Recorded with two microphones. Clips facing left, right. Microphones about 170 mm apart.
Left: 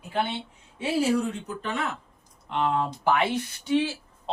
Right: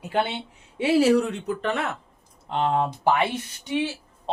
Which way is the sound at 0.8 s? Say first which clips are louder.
Right 6 dB; 75° right (ahead or behind).